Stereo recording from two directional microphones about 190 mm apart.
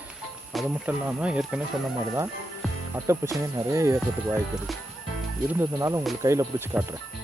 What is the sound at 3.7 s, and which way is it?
Speech, 15° right (ahead or behind).